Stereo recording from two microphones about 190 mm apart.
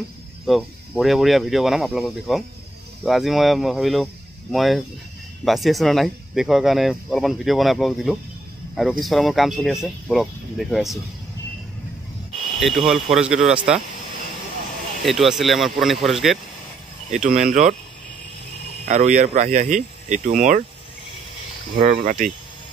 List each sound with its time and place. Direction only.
0.5 s speech: 5° right (ahead or behind)
12.5 s speech: centre (ahead or behind)
15.0 s speech: centre (ahead or behind)
17.1 s speech: 40° right (ahead or behind)
18.9 s speech: 40° right (ahead or behind)
21.8 s speech: 40° right (ahead or behind)